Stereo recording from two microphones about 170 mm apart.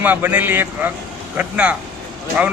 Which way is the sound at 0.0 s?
10° right (ahead or behind).